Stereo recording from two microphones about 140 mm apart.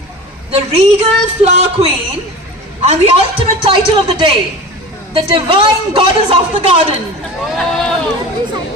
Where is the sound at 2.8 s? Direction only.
40° right (ahead or behind).